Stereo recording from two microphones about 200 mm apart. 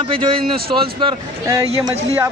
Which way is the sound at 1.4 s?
15° right (ahead or behind).